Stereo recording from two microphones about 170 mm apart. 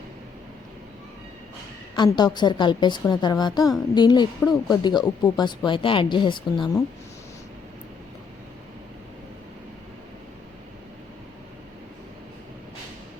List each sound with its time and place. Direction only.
2.0 s speech: 25° left (ahead or behind)